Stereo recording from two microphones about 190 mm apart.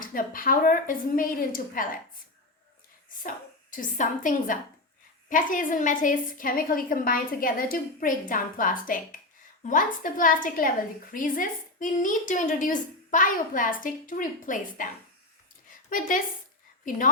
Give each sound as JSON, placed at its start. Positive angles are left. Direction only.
{"t": 0.0, "sound": "a woman's voice", "side_deg": 45}
{"t": 3.2, "sound": "a woman's voice", "side_deg": 45}
{"t": 15.9, "sound": "a woman's voice", "side_deg": 45}